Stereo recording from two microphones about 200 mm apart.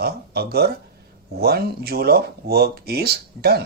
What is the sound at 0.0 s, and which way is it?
Speech, 50° right (ahead or behind).